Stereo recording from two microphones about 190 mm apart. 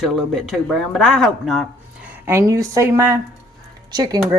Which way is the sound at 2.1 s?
10° right (ahead or behind).